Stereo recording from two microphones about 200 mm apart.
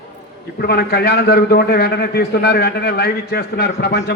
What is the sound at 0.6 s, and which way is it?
A man's voice, 50° left (ahead or behind).